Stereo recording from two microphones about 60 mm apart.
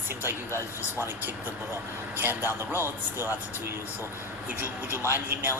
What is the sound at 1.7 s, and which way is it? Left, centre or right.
A man's voice, right.